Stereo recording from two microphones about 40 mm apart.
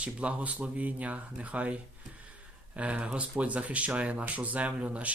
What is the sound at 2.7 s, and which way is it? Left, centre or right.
Speech, right.